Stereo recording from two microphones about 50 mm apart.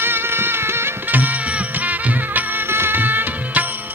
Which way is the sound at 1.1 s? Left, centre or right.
Right.